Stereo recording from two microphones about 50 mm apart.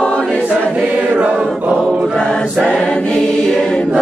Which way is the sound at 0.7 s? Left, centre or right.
Right.